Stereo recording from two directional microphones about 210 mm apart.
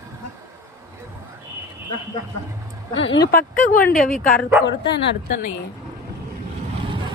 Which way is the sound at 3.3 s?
40° left (ahead or behind).